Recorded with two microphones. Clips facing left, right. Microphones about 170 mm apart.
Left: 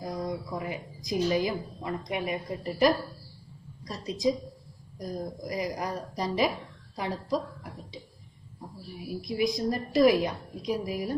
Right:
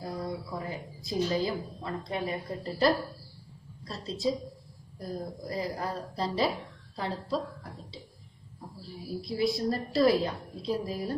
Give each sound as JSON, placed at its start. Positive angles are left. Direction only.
{"t": 0.5, "sound": "a woman's voice", "side_deg": 15}
{"t": 8.9, "sound": "a woman's voice", "side_deg": 15}